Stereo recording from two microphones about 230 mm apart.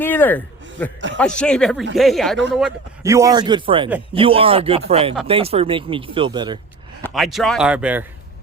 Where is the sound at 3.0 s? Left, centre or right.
Centre.